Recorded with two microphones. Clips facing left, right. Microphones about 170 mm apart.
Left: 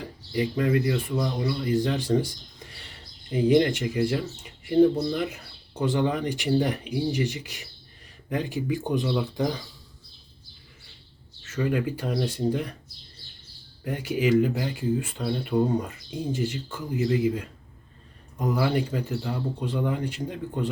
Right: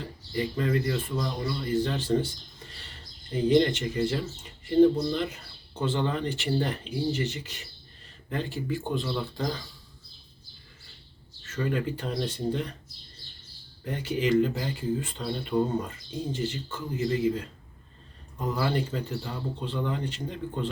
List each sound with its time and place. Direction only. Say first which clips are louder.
0.0 s speech: left 3 dB; 10° left (ahead or behind)
11.4 s speech: left 3 dB; 10° left (ahead or behind)
13.8 s speech: left 3 dB; 10° left (ahead or behind)